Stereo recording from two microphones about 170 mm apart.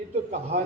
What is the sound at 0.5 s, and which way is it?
Speech, 45° right (ahead or behind).